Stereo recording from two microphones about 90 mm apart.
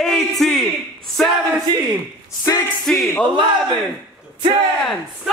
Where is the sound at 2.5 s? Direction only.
40° left (ahead or behind).